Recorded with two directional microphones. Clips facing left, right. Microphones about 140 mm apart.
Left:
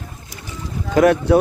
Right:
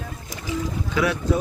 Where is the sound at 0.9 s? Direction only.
50° left (ahead or behind).